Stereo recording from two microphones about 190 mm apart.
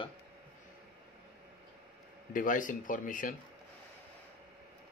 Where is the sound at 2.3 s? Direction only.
45° left (ahead or behind).